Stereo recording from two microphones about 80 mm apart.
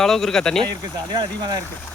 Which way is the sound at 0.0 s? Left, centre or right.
Centre.